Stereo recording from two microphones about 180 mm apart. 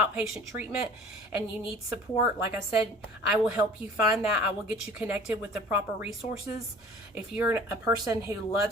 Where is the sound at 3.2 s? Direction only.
5° right (ahead or behind).